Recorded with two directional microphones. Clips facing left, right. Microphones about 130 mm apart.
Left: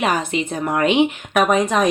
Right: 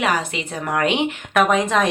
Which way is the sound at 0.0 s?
20° left (ahead or behind).